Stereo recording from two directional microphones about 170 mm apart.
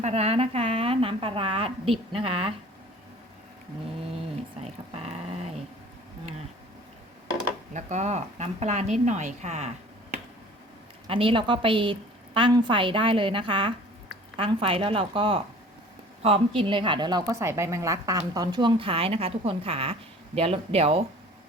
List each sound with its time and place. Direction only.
0.0 s a woman's voice: 35° right (ahead or behind)
4.6 s a sound: 40° right (ahead or behind)
7.7 s a woman's voice: 45° right (ahead or behind)
11.1 s a woman's voice: 30° right (ahead or behind)
16.6 s a woman's voice: 30° right (ahead or behind)